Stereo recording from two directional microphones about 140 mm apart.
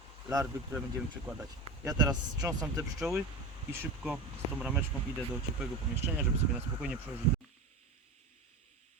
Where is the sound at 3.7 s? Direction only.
15° right (ahead or behind).